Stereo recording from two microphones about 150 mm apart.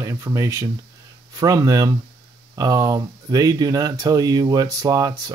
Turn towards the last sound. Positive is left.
turn(degrees=-25)  # may be behind; listen again after turning